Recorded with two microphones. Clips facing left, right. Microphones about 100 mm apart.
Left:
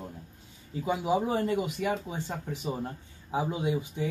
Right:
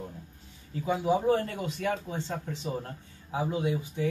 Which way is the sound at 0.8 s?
15° left (ahead or behind).